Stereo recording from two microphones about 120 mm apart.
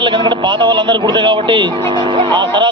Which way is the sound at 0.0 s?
45° right (ahead or behind).